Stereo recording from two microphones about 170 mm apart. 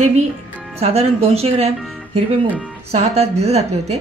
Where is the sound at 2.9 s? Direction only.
40° right (ahead or behind).